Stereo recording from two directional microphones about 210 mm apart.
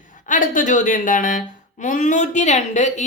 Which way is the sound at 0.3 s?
40° left (ahead or behind).